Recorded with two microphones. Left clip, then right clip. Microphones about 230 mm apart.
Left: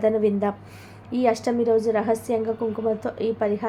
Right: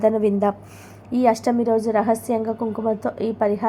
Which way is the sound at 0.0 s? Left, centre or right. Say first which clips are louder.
Right 3 dB; centre.